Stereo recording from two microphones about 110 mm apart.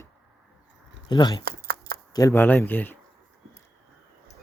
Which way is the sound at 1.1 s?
40° left (ahead or behind).